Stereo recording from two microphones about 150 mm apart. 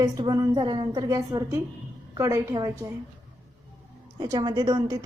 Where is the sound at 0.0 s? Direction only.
25° right (ahead or behind).